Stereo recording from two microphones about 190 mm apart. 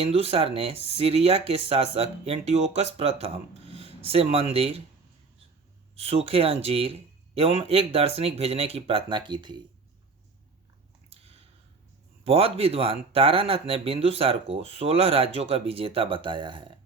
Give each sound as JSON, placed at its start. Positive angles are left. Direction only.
{"t": 0.0, "sound": "speech", "side_deg": -30}
{"t": 6.0, "sound": "speech", "side_deg": -30}
{"t": 12.2, "sound": "speech", "side_deg": -30}